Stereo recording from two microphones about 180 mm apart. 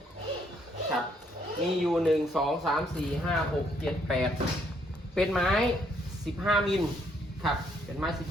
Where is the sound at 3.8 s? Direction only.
Centre (ahead or behind).